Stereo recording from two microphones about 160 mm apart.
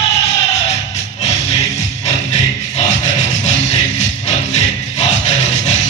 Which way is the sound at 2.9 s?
45° left (ahead or behind).